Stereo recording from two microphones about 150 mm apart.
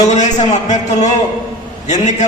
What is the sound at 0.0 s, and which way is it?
A man's voice, 50° left (ahead or behind).